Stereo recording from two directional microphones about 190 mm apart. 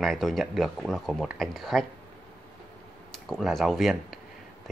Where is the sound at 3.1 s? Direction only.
Centre (ahead or behind).